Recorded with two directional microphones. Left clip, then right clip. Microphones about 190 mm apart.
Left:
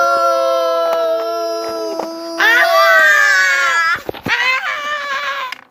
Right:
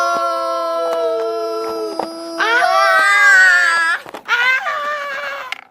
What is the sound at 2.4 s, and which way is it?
Music, 30° left (ahead or behind).